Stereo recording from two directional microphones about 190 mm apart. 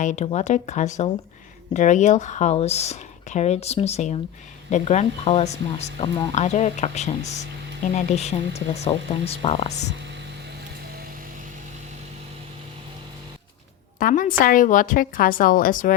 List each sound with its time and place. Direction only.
0.0 s speech: 40° left (ahead or behind)
14.0 s a woman's voice: 45° left (ahead or behind)